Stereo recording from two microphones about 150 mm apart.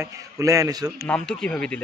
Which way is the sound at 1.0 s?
5° left (ahead or behind).